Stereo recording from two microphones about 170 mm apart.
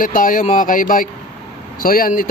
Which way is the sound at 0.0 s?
55° left (ahead or behind).